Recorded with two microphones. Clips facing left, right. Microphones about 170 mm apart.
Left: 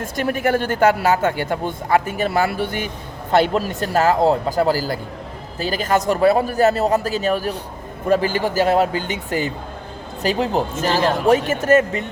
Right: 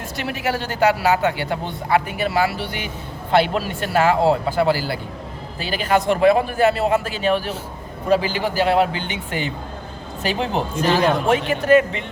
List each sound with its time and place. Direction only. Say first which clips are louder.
0.0 s a man's voice: left 5 dB; 50° left (ahead or behind)